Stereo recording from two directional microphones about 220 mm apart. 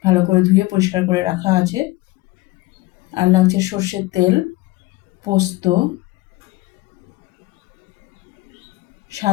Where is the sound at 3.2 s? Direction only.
15° right (ahead or behind).